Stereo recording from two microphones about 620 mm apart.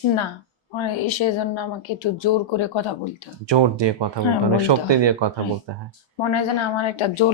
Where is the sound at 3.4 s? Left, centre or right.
Right.